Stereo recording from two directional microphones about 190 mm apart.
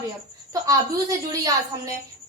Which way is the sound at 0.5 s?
20° right (ahead or behind).